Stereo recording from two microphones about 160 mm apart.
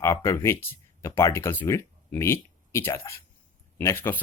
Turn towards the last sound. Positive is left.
turn(degrees=15)  # may be behind; listen again after turning